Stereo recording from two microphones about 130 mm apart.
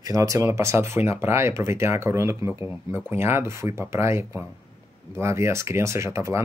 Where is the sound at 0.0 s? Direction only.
25° right (ahead or behind).